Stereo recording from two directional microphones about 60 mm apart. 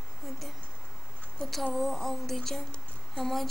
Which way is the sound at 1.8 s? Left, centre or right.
Centre.